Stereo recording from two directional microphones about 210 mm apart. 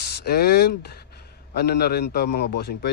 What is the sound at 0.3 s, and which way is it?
A man's voice, 50° left (ahead or behind).